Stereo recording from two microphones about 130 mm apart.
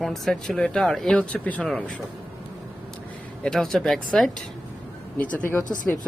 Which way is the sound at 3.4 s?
5° left (ahead or behind).